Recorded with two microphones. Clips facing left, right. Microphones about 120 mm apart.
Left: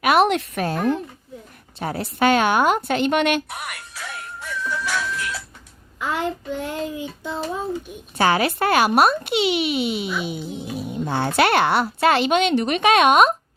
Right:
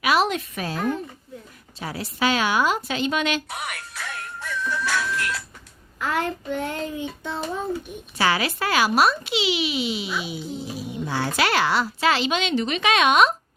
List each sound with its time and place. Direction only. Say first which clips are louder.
0.0 s a sound: left 4 dB; 55° left (ahead or behind)
1.8 s a woman's voice: left 5 dB; 50° left (ahead or behind)
3.5 s a child's voice: right 1 dB; centre (ahead or behind)
4.9 s a child's voice: even; 10° left (ahead or behind)
8.2 s speech: left 4 dB; 50° left (ahead or behind)